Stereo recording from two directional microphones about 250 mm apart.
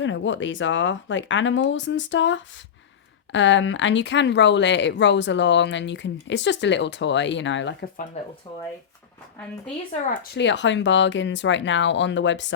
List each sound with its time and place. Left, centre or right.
0.0 s speech: left
10.3 s speech: left